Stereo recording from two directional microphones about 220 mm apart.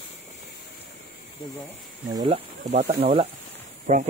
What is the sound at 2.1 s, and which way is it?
Speech, 20° right (ahead or behind).